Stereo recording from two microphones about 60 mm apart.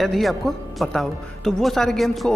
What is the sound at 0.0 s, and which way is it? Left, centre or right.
A man's voice, centre.